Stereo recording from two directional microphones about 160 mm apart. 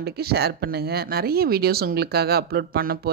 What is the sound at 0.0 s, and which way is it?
Speech, 80° right.